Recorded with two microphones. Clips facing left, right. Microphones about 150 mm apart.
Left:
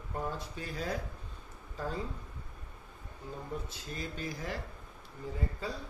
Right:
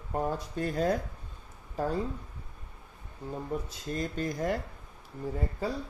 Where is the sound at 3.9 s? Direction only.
50° right (ahead or behind).